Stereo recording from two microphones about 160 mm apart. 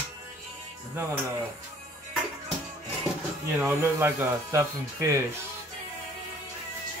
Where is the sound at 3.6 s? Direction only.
15° right (ahead or behind).